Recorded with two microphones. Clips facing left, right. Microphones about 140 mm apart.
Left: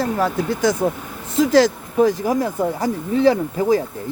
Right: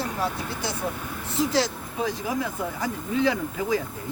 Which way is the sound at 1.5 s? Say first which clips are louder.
Left 10 dB; 50° left (ahead or behind).